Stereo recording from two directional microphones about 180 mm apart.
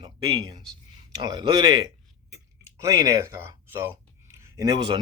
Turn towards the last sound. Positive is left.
turn(degrees=-25)  # may be behind; listen again after turning